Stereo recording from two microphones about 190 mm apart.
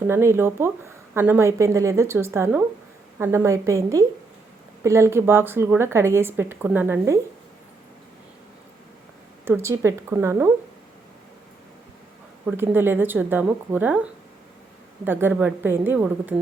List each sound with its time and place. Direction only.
0.1 s a woman's voice: 15° right (ahead or behind)
9.4 s a woman's voice: 15° right (ahead or behind)
12.5 s a woman's voice: 10° right (ahead or behind)